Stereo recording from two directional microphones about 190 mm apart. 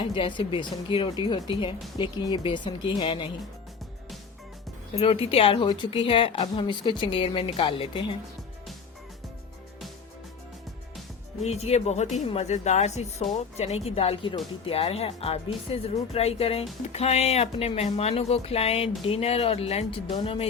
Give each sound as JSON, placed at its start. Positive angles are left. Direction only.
{"t": 0.0, "sound": "speech", "side_deg": 25}
{"t": 4.9, "sound": "speech", "side_deg": 30}
{"t": 11.4, "sound": "speech", "side_deg": 35}